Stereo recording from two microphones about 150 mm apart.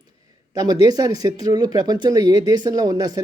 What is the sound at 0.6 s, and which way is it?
Speech, 25° right (ahead or behind).